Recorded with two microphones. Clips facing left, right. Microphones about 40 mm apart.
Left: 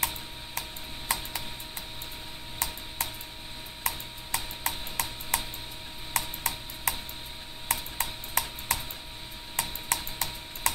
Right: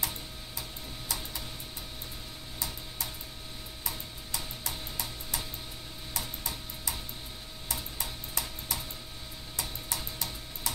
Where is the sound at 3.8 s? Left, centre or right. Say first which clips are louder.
Left 7 dB; left.